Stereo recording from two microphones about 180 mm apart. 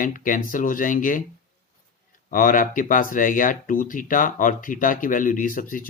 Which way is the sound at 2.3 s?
50° left (ahead or behind).